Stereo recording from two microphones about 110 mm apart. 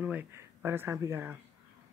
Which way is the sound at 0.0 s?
15° right (ahead or behind).